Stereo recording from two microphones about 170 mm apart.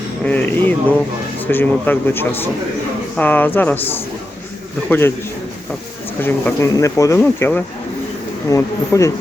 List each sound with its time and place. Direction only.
0.3 s a sound: 10° left (ahead or behind)
1.5 s speech: 10° left (ahead or behind)
6.2 s speech: 15° left (ahead or behind)